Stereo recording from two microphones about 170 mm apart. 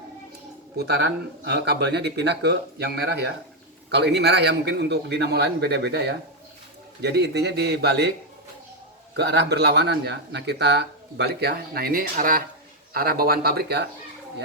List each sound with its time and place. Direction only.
0.8 s a man's voice: 75° right (ahead or behind)
9.1 s speech: 75° right (ahead or behind)